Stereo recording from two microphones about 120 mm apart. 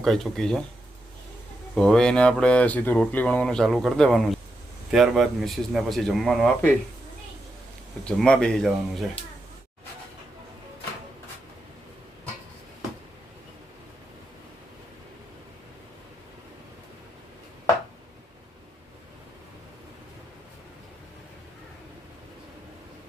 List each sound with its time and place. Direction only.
0.0 s speech: 5° left (ahead or behind)
1.7 s speech: 5° left (ahead or behind)
8.0 s speech: 5° left (ahead or behind)